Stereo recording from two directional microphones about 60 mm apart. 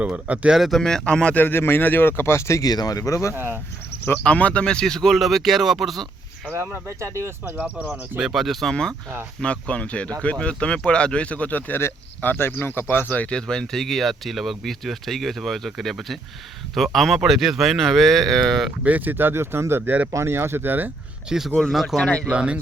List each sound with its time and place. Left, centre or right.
0.5 s speech: centre
0.8 s speech: centre
1.4 s speech: left
2.6 s speech: left
3.3 s speech: right
4.2 s speech: left; by 6.1 s centre
6.8 s speech: right
8.2 s speech: centre
8.7 s speech: centre; by 13.1 s left
13.1 s speech: centre
18.8 s speech: right
21.2 s speech: centre
22.3 s speech: centre